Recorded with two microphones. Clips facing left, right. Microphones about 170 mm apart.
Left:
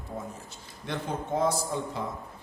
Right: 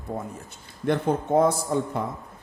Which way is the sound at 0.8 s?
55° right (ahead or behind).